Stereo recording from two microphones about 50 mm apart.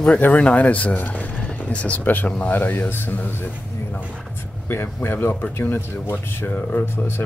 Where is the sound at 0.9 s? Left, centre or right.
Left.